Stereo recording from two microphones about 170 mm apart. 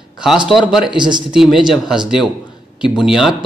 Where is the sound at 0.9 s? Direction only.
25° right (ahead or behind).